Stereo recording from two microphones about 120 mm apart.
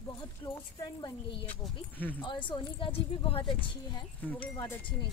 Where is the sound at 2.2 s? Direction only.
40° left (ahead or behind).